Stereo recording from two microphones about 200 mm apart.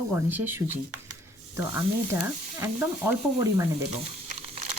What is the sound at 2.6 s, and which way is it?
Speech, 10° right (ahead or behind).